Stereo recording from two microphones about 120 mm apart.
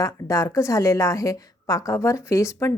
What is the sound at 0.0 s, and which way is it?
A woman's voice, 25° left (ahead or behind).